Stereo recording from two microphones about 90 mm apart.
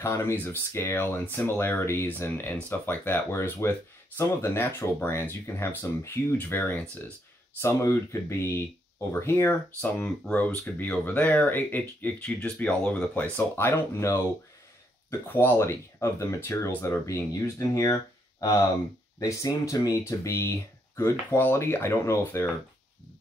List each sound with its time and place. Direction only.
0.0 s speech: 30° left (ahead or behind)
19.1 s speech: 35° left (ahead or behind)